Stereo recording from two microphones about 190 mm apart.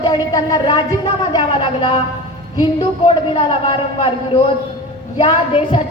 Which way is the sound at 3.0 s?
25° left (ahead or behind).